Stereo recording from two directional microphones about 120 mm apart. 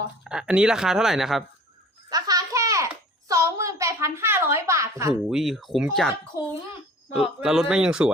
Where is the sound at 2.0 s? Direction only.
30° right (ahead or behind).